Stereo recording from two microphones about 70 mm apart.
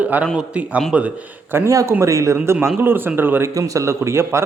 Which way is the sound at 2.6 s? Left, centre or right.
Right.